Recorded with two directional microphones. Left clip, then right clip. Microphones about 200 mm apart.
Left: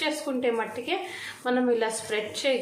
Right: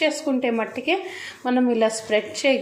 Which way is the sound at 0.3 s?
25° right (ahead or behind).